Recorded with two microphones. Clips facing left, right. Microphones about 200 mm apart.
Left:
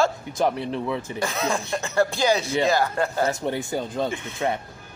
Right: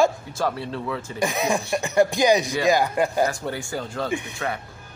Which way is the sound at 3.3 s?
20° left (ahead or behind).